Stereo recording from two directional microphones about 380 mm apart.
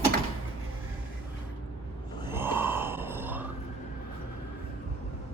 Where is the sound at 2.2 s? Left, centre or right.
Centre.